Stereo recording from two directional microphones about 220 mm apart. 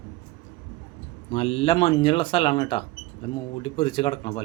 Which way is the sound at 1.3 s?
25° left (ahead or behind).